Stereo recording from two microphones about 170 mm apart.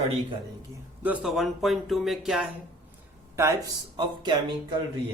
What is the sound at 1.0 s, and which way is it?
Speech, 5° right (ahead or behind).